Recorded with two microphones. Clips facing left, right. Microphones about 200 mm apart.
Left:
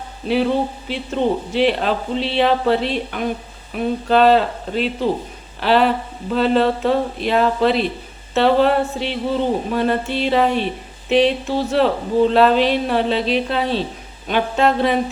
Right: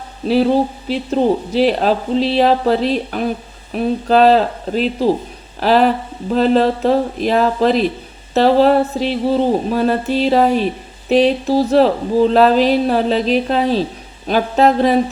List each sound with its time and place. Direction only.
0.3 s a man's voice: 35° right (ahead or behind)